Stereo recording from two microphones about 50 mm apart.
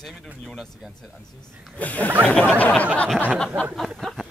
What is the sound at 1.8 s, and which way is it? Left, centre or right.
Speech, left.